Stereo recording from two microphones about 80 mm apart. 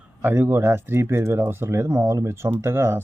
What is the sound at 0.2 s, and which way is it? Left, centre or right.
Speech, right.